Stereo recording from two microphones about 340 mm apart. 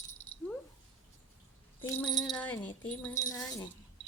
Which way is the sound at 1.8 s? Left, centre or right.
Centre.